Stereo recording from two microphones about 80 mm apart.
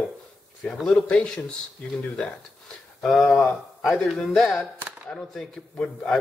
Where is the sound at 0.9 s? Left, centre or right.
Centre.